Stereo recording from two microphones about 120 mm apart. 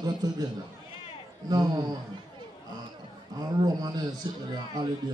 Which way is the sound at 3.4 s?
35° right (ahead or behind).